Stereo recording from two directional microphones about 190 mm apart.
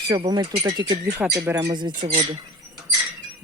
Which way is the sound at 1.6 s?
25° right (ahead or behind).